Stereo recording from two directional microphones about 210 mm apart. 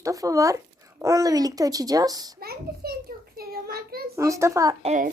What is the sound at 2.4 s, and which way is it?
Speech, 45° right (ahead or behind).